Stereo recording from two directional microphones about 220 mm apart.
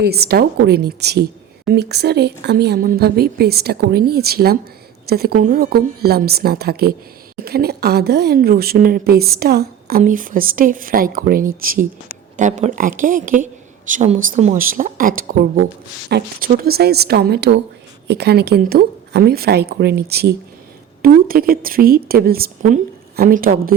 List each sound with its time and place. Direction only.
0.0 s a woman's voice: 45° right (ahead or behind)